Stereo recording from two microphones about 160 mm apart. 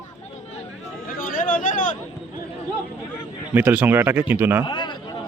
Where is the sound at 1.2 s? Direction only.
55° left (ahead or behind).